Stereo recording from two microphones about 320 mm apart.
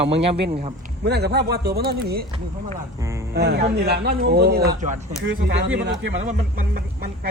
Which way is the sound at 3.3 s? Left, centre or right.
Right.